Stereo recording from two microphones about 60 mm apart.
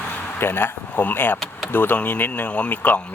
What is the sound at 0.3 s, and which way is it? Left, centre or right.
Speech, left.